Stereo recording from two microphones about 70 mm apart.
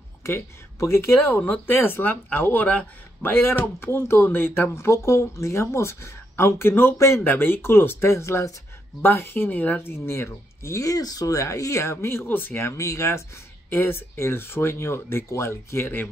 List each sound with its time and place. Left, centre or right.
0.2 s speech: left
1.4 s speech: left
9.0 s speech: left
12.6 s speech: left
13.7 s speech: left